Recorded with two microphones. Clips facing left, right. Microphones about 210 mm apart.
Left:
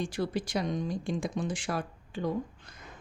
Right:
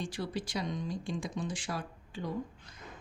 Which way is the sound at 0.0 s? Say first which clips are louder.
Left 5 dB; 50° left (ahead or behind).